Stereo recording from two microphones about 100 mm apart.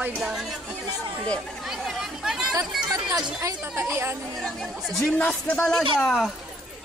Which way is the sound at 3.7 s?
25° right (ahead or behind).